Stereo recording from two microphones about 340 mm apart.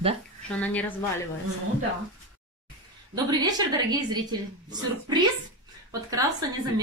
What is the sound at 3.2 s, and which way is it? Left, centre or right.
A woman's voice, centre.